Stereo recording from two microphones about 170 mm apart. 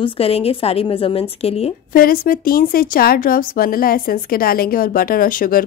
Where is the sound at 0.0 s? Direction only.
35° left (ahead or behind).